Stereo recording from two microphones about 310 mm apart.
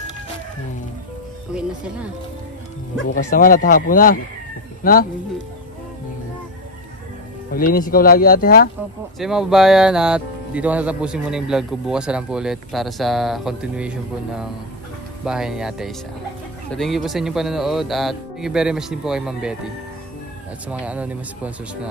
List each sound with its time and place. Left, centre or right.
1.5 s speech: centre
3.3 s speech: left
7.5 s speech: left
9.2 s speech: centre
20.6 s speech: centre